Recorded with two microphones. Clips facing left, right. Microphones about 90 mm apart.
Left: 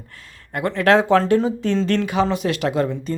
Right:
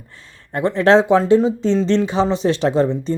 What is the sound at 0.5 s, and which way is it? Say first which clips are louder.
Speech: right 3 dB; 25° right (ahead or behind).